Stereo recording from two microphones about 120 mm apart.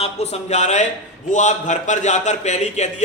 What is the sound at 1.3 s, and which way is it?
A man's voice, 90° left.